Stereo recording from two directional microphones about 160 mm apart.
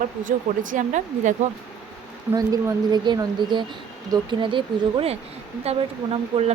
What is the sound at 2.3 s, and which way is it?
Speech, 20° right (ahead or behind).